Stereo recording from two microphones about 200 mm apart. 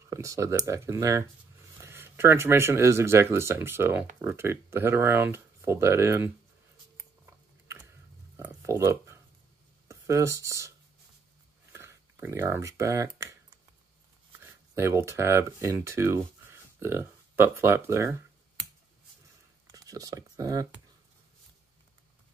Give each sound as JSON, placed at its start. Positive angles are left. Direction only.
{"t": 0.1, "sound": "speech", "side_deg": -15}
{"t": 7.0, "sound": "a sound", "side_deg": -15}
{"t": 9.8, "sound": "speech", "side_deg": -15}
{"t": 11.7, "sound": "speech", "side_deg": -15}
{"t": 14.4, "sound": "speech", "side_deg": -15}
{"t": 19.7, "sound": "speech", "side_deg": -15}